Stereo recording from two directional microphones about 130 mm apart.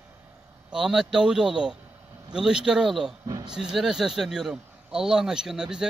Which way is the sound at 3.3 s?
30° right (ahead or behind).